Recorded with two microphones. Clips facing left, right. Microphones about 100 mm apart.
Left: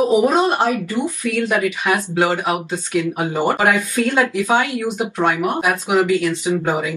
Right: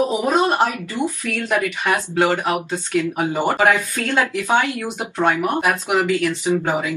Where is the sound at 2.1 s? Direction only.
10° left (ahead or behind).